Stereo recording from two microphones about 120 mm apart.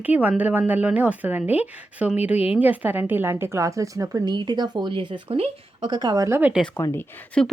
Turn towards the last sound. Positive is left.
turn(degrees=5)  # may be behind; listen again after turning